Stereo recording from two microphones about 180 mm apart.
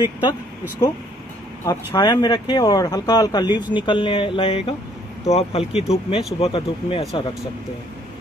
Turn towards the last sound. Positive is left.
turn(degrees=30)  # may be behind; listen again after turning